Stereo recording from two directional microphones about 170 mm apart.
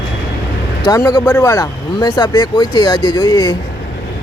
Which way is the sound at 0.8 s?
20° left (ahead or behind).